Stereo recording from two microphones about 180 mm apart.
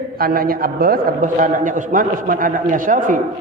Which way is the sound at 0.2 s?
55° right (ahead or behind).